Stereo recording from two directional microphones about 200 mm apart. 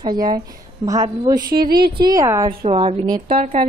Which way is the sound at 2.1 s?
15° right (ahead or behind).